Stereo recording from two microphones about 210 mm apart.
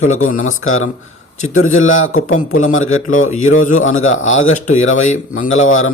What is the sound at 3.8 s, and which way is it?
Speech, 70° left (ahead or behind).